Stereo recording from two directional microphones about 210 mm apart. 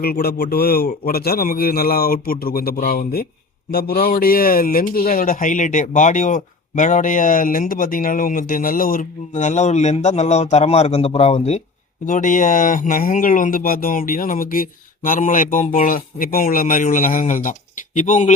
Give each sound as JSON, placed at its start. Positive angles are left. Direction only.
{"t": 0.0, "sound": "a man's voice", "side_deg": 45}